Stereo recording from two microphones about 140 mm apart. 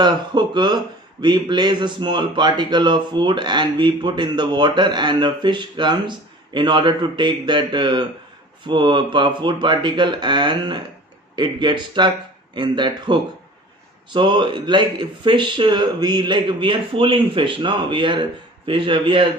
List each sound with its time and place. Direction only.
0.0 s speech: 30° right (ahead or behind)